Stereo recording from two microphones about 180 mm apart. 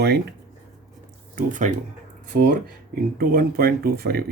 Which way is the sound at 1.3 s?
45° right (ahead or behind).